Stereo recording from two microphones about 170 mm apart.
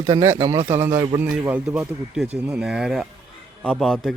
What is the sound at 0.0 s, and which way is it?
A man's voice, 15° right (ahead or behind).